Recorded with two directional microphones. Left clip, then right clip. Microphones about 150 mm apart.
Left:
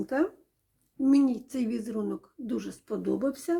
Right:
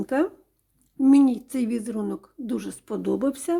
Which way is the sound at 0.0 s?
30° right (ahead or behind).